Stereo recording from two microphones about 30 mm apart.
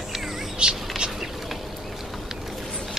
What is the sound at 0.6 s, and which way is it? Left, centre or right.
Speech, right.